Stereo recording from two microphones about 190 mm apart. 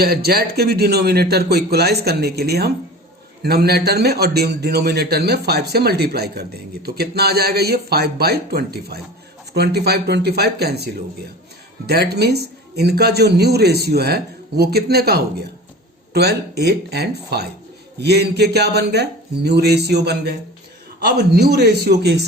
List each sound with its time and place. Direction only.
0.0 s a man's voice: 55° right (ahead or behind)
11.9 s a man's voice: 55° right (ahead or behind)